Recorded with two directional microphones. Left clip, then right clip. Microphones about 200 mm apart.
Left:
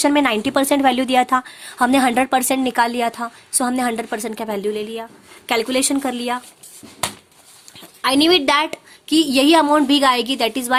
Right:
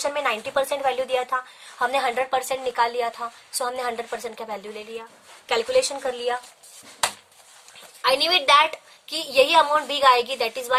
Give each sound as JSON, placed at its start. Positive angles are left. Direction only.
{"t": 0.0, "sound": "a woman's voice", "side_deg": 55}
{"t": 8.0, "sound": "a woman's voice", "side_deg": 45}